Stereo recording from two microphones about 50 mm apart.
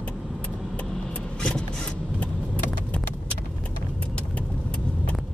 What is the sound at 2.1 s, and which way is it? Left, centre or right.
Vehicle, left.